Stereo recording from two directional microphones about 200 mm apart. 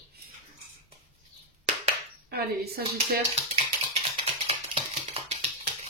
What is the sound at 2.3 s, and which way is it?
Speech, 50° right (ahead or behind).